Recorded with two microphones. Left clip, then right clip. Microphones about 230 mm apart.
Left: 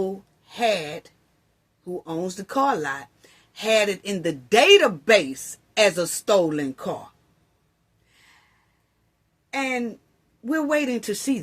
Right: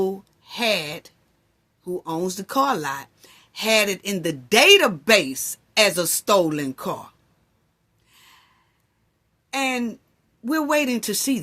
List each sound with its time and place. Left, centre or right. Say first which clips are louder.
0.0 s speech: right 3 dB; right
8.1 s a sound: right 3 dB; right
9.5 s speech: right 2 dB; right